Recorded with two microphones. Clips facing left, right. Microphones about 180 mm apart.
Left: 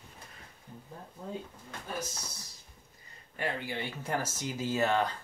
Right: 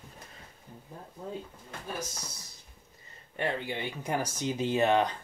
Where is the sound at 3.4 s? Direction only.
20° right (ahead or behind).